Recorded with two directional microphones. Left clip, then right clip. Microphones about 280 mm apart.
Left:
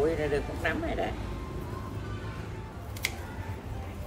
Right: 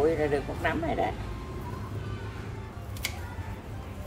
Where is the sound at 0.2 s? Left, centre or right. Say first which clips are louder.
Right 2 dB; centre.